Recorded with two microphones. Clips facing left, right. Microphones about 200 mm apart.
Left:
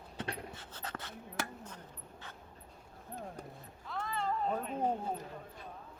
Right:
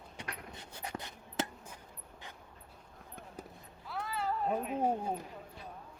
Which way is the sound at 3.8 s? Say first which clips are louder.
Even; 5° right (ahead or behind).